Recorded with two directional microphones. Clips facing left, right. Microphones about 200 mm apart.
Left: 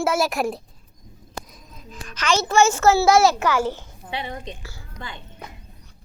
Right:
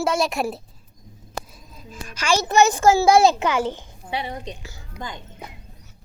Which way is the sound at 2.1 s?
10° right (ahead or behind).